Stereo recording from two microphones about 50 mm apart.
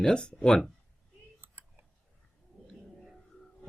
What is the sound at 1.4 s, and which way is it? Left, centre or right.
Clicking, right.